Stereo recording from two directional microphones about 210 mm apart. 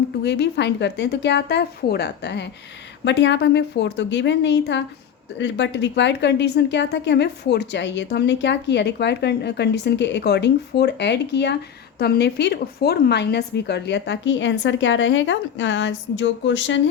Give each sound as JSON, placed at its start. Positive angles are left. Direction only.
{"t": 0.2, "sound": "a woman's voice", "side_deg": 55}